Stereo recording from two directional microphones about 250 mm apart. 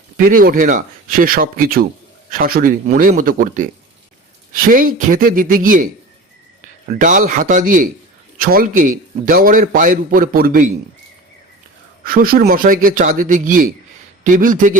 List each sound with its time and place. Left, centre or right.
0.2 s a man's voice: right
12.0 s a man's voice: right